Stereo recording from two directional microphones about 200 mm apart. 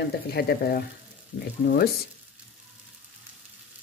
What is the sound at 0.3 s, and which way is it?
Speech, 50° left (ahead or behind).